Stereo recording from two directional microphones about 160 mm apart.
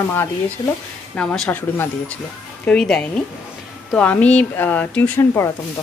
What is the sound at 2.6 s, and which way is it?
Speech, 5° left (ahead or behind).